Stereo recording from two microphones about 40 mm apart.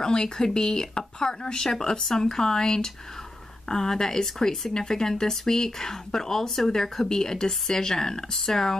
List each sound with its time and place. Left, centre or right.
0.0 s speech: centre